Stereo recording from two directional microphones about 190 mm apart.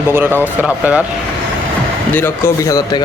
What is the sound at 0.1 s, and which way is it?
Speech, 10° right (ahead or behind).